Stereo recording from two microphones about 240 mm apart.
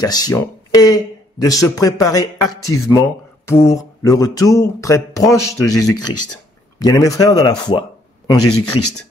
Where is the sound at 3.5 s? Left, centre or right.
Centre.